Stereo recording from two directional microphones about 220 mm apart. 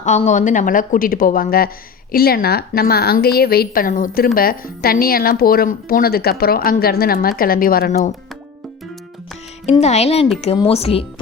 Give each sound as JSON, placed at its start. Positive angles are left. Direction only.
{"t": 0.0, "sound": "a woman's voice", "side_deg": 35}
{"t": 9.8, "sound": "speech", "side_deg": 30}